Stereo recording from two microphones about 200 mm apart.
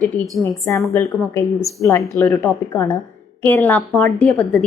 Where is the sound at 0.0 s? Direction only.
Centre (ahead or behind).